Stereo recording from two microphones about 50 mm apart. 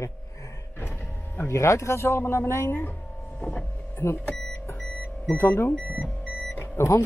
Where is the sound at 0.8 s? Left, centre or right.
Left.